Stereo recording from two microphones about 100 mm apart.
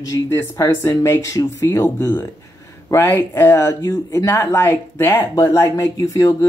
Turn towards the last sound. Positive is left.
turn(degrees=35)  # may be behind; listen again after turning